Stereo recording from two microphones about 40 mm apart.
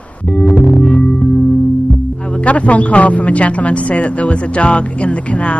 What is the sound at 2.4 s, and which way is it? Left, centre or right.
Speech, left.